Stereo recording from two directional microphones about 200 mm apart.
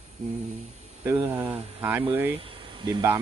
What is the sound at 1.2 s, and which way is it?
Speech, 10° right (ahead or behind).